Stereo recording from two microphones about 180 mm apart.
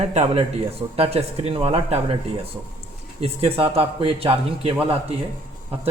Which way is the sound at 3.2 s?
35° right (ahead or behind).